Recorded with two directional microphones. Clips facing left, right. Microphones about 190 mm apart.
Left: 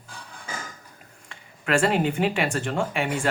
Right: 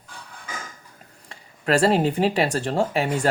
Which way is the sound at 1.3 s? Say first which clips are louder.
Right 3 dB; 35° right (ahead or behind).